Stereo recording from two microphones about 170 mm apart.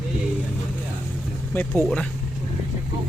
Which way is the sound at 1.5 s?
10° left (ahead or behind).